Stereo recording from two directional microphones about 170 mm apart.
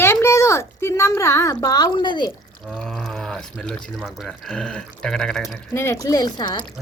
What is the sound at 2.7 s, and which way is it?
Speech, 5° left (ahead or behind).